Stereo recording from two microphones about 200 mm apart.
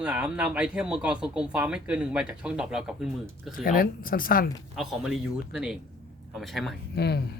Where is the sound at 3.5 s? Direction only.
45° left (ahead or behind).